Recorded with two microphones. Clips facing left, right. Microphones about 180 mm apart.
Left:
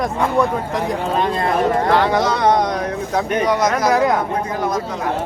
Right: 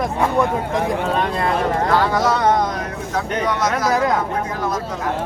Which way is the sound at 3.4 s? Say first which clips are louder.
Left 2 dB; 15° left (ahead or behind).